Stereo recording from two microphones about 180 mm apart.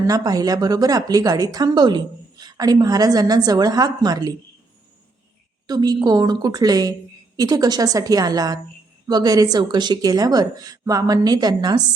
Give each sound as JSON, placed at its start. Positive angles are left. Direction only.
{"t": 0.1, "sound": "a woman's voice", "side_deg": -20}
{"t": 5.6, "sound": "a woman's voice", "side_deg": -20}